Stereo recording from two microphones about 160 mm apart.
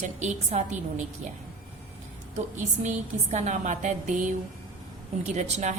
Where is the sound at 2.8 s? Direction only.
50° right (ahead or behind).